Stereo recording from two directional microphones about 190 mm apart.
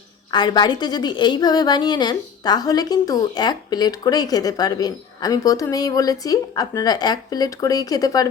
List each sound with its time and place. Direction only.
0.3 s a woman's voice: 20° left (ahead or behind)